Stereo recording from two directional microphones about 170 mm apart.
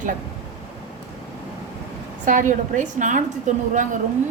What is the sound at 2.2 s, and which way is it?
A woman's voice, 50° right (ahead or behind).